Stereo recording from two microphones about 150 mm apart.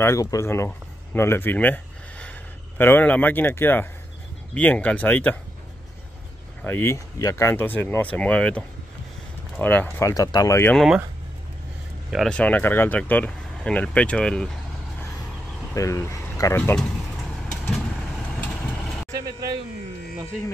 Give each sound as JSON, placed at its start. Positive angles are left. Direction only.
{"t": 0.0, "sound": "speech", "side_deg": 20}
{"t": 0.7, "sound": "a sound", "side_deg": 15}
{"t": 2.8, "sound": "speech", "side_deg": 10}
{"t": 6.6, "sound": "speech", "side_deg": 15}
{"t": 10.7, "sound": "speech", "side_deg": 0}
{"t": 12.1, "sound": "speech", "side_deg": 5}
{"t": 15.7, "sound": "speech", "side_deg": 20}